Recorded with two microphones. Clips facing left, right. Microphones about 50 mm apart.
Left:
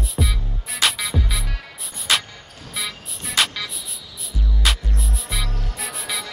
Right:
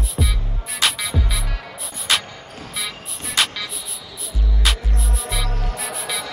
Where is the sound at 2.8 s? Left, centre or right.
Centre.